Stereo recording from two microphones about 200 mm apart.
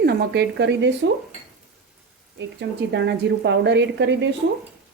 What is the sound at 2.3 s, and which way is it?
A woman's voice, 60° right (ahead or behind).